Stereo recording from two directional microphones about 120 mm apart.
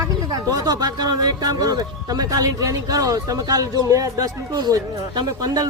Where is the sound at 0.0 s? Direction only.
30° right (ahead or behind).